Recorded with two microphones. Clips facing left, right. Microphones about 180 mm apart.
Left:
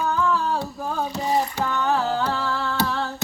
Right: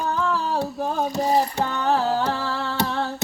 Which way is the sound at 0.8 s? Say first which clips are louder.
Right 3 dB; 20° right (ahead or behind).